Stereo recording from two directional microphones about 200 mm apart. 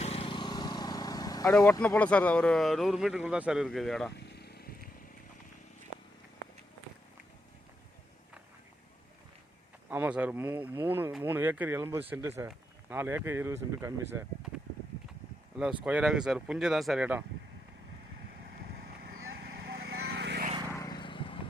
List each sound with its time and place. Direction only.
0.0 s vehicle: 30° left (ahead or behind)
1.5 s speech: 5° left (ahead or behind)
4.4 s vehicle: 50° left (ahead or behind)
9.9 s speech: 5° right (ahead or behind)
15.8 s speech: 5° right (ahead or behind)
19.2 s vehicle: 90° right; by 20.4 s 60° right (ahead or behind)
20.7 s vehicle: 15° left (ahead or behind)